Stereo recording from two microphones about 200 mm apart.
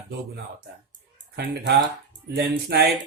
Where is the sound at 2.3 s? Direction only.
55° right (ahead or behind).